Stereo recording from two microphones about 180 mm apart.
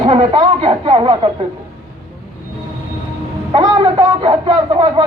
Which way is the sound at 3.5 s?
20° right (ahead or behind).